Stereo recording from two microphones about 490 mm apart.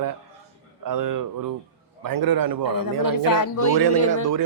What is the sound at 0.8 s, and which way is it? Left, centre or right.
A man's voice, right.